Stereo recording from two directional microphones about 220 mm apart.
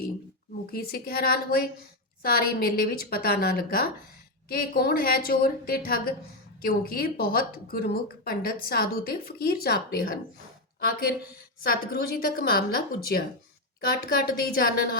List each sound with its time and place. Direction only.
0.7 s a woman's voice: 45° left (ahead or behind)